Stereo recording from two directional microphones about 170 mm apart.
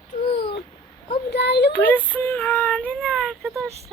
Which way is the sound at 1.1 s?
80° left.